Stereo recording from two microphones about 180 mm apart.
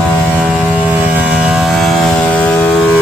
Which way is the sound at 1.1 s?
5° right (ahead or behind).